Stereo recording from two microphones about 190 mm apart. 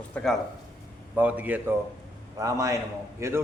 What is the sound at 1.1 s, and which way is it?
A man's voice, 10° right (ahead or behind).